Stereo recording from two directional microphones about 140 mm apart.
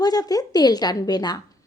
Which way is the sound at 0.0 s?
30° left (ahead or behind).